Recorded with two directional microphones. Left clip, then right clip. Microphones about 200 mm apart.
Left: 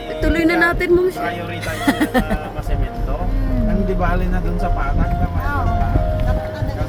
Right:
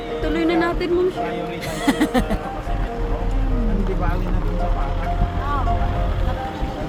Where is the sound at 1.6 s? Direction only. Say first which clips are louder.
Left 2 dB; 10° left (ahead or behind).